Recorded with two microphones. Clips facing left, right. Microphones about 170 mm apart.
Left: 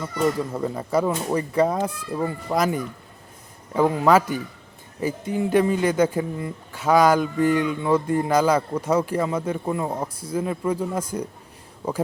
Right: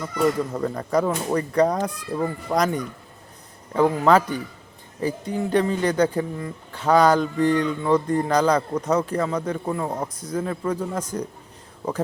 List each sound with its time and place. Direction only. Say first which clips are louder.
0.5 s speech: right 1 dB; 10° left (ahead or behind)
4.9 s speech: even; 20° left (ahead or behind)
5.3 s speech: left 2 dB; 10° left (ahead or behind)
6.7 s speech: even; 10° left (ahead or behind)